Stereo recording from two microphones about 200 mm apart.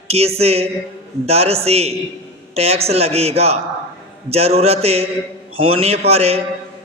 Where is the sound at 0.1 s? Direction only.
30° right (ahead or behind).